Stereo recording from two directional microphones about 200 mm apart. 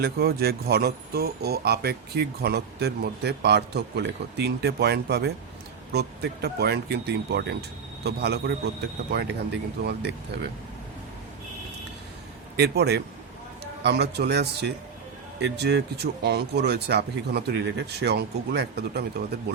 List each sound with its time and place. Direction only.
0.0 s speech: 50° right (ahead or behind)
12.5 s speech: 55° right (ahead or behind)